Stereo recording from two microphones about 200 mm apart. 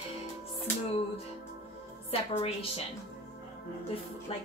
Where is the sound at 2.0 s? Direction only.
30° left (ahead or behind).